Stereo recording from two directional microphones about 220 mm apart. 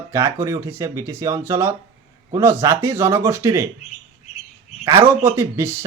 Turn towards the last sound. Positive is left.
turn(degrees=-10)  # may be behind; listen again after turning